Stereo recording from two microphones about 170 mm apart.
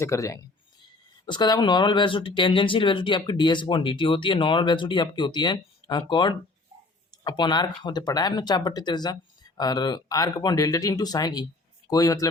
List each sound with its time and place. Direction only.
0.0 s speech: 20° left (ahead or behind)